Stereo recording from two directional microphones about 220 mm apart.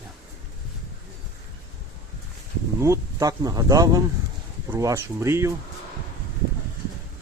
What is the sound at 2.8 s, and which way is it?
Speech, 15° right (ahead or behind).